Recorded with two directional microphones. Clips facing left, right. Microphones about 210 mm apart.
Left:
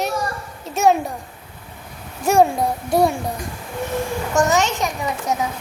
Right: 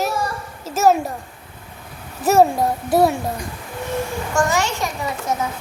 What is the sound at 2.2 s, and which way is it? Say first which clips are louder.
Speech: right 1 dB; 5° right (ahead or behind).